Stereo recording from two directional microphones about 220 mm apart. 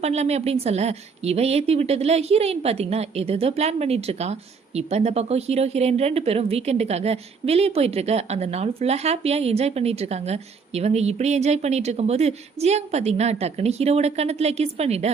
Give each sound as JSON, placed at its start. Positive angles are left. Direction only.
{"t": 0.0, "sound": "a woman's voice", "side_deg": -30}